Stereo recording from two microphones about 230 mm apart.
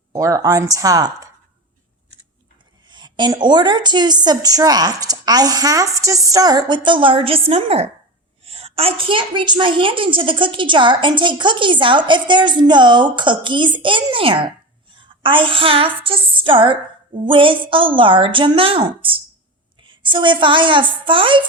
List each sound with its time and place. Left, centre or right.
0.1 s a woman's voice: centre
2.9 s a woman's voice: centre